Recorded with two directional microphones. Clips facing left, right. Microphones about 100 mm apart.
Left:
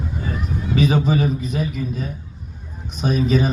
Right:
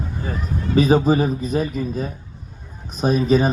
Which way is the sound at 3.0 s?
40° right (ahead or behind).